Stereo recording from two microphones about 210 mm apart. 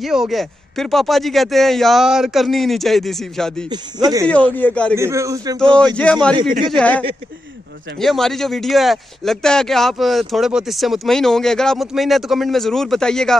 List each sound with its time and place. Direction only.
0.0 s speech: centre (ahead or behind)
3.7 s speech: 20° right (ahead or behind)
4.3 s speech: 5° left (ahead or behind)
4.9 s a man's voice: 15° right (ahead or behind)
6.1 s speech: 5° left (ahead or behind)